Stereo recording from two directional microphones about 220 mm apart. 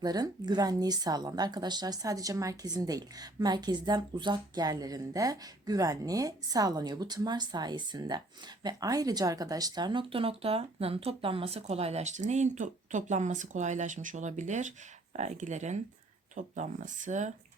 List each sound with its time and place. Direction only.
0.0 s a woman's voice: 20° right (ahead or behind); by 17.3 s 35° right (ahead or behind)